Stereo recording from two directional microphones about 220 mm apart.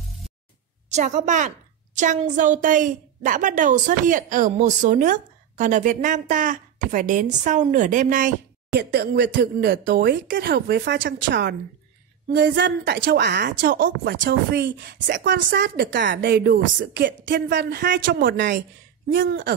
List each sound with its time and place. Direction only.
0.8 s a woman's voice: 35° right (ahead or behind)
8.7 s a woman's voice: 45° right (ahead or behind)